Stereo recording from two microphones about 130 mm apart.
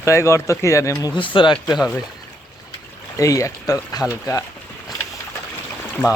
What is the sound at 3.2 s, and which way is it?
Speech, 25° left (ahead or behind).